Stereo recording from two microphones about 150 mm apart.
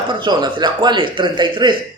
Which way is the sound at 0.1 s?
30° right (ahead or behind).